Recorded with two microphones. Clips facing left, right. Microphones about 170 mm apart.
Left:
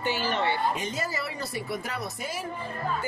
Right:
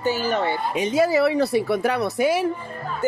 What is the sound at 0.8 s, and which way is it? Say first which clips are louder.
Speech: right 14 dB; 70° right (ahead or behind).